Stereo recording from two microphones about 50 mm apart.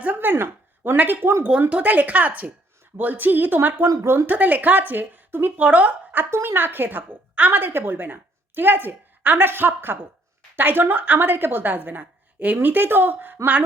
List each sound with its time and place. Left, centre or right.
0.0 s a woman's voice: right
5.6 s a woman's voice: right
6.3 s a woman's voice: right